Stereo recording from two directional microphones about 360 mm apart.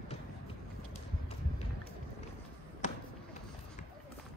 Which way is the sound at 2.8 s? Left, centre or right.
Centre.